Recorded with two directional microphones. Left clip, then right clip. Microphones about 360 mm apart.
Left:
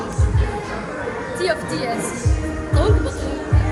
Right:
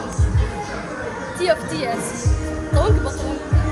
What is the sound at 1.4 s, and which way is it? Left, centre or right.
Speech, centre.